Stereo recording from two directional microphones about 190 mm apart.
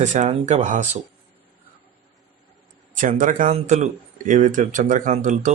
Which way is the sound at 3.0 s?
45° right (ahead or behind).